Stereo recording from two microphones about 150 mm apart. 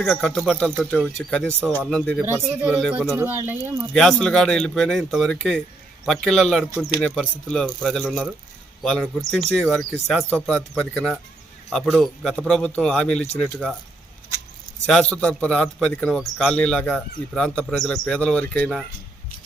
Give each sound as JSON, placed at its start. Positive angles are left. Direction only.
{"t": 0.0, "sound": "speech", "side_deg": 0}
{"t": 2.2, "sound": "speech", "side_deg": -15}
{"t": 2.9, "sound": "speech", "side_deg": -5}
{"t": 3.2, "sound": "speech", "side_deg": -15}
{"t": 3.9, "sound": "speech", "side_deg": 5}
{"t": 14.8, "sound": "a man's voice", "side_deg": 5}